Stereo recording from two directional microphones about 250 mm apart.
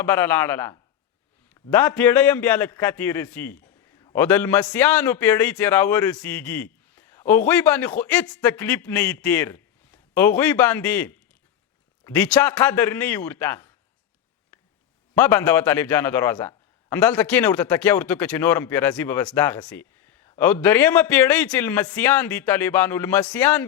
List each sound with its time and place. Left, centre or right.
0.0 s a man's voice: centre
15.1 s a man's voice: centre